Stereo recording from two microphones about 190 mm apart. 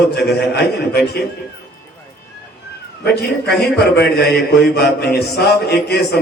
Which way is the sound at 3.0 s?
60° left (ahead or behind).